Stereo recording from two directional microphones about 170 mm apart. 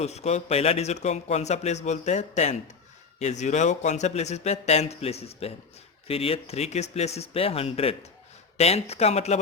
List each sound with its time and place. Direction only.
0.0 s a man's voice: 40° left (ahead or behind)